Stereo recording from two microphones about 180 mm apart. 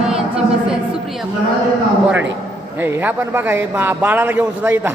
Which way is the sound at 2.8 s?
10° right (ahead or behind).